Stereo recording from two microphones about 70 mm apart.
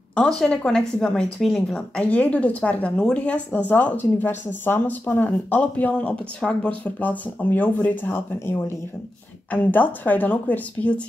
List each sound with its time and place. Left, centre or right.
0.2 s a woman's voice: centre